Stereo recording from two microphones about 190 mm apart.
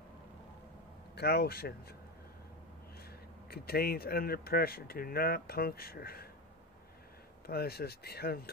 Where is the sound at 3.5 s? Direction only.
55° left (ahead or behind).